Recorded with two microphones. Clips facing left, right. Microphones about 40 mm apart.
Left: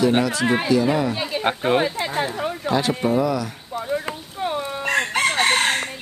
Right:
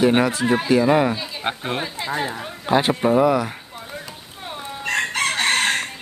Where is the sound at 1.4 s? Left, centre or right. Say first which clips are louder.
Left 8 dB; centre.